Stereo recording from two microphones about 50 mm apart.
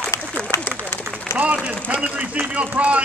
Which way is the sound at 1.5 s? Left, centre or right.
Right.